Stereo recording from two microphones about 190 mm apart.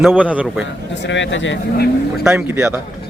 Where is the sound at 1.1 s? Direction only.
75° left (ahead or behind).